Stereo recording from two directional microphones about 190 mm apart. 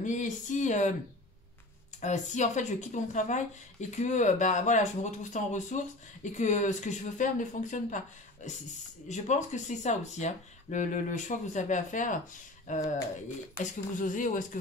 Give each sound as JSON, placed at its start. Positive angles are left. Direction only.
{"t": 0.0, "sound": "speech", "side_deg": 40}
{"t": 2.0, "sound": "speech", "side_deg": 40}
{"t": 9.1, "sound": "speech", "side_deg": 40}
{"t": 13.9, "sound": "speech", "side_deg": 45}